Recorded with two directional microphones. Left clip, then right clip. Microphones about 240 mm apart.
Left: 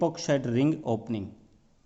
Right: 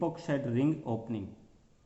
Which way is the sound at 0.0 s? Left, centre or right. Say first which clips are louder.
Left 6 dB; left.